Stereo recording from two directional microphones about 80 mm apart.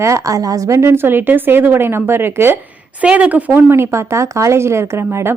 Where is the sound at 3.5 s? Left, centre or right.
Right.